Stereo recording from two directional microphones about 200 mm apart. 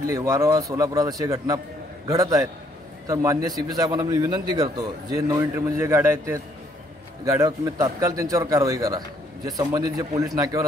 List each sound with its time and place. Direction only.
0.0 s a man's voice: 15° right (ahead or behind)